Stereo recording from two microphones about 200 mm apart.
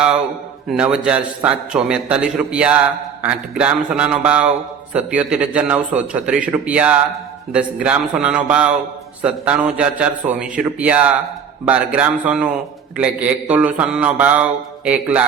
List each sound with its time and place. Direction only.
0.7 s a man's voice: 5° right (ahead or behind)